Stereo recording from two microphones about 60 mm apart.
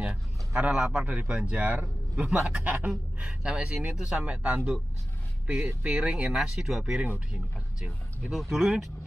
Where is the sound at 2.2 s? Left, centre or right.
Centre.